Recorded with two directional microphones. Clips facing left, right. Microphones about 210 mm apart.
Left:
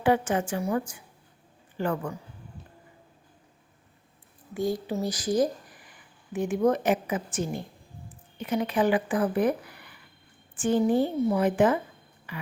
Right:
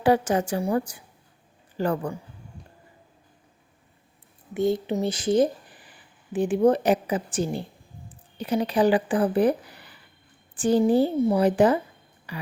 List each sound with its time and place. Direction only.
0.0 s a woman's voice: 40° right (ahead or behind)
4.5 s a woman's voice: 25° right (ahead or behind)